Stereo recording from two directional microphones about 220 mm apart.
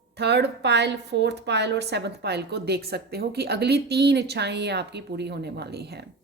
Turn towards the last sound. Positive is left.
turn(degrees=-45)  # may be behind; listen again after turning